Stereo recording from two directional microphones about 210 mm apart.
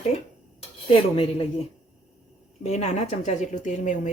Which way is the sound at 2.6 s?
35° left (ahead or behind).